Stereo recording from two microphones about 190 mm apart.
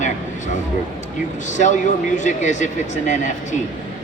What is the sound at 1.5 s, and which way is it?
A man's voice, 40° left (ahead or behind).